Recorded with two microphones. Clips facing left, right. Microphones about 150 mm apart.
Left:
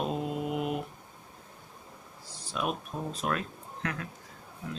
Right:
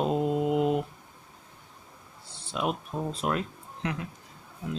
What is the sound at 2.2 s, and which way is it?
Speech, 25° right (ahead or behind).